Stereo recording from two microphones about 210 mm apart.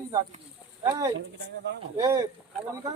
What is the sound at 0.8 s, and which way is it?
Speech, 20° right (ahead or behind).